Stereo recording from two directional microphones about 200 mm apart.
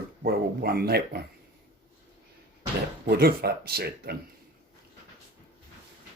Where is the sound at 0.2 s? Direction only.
50° right (ahead or behind).